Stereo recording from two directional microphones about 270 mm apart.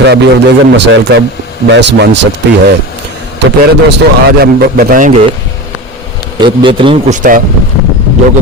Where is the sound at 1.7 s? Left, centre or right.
Right.